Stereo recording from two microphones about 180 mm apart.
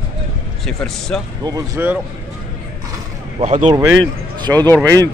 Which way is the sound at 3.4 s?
40° right (ahead or behind).